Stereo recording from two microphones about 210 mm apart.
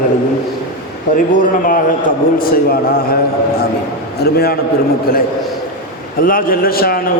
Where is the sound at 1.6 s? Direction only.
40° left (ahead or behind).